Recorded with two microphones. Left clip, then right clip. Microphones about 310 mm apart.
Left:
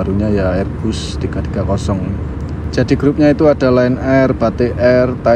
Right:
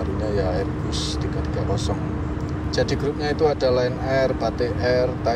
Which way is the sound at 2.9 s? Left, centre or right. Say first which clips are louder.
Left 12 dB; left.